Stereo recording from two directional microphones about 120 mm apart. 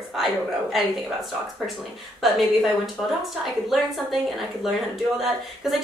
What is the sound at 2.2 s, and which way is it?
Speech, centre (ahead or behind).